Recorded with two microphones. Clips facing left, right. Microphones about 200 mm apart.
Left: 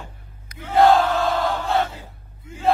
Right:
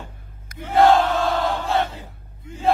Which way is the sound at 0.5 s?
45° right (ahead or behind).